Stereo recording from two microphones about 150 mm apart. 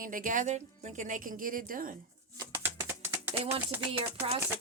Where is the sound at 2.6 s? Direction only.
15° right (ahead or behind).